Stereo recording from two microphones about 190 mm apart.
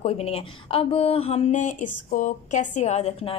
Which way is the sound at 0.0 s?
30° left (ahead or behind).